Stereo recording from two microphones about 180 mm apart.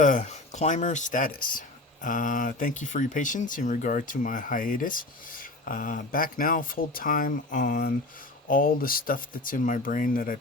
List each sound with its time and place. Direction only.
0.0 s speech: 45° left (ahead or behind)